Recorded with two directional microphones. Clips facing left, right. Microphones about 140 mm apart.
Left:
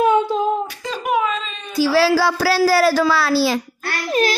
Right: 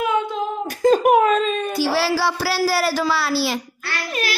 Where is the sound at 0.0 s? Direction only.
30° left (ahead or behind).